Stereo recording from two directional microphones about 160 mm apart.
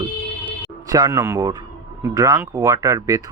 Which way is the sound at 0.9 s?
25° right (ahead or behind).